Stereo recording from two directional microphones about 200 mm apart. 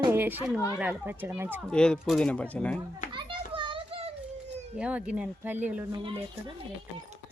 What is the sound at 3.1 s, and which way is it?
Children playing, 25° right (ahead or behind).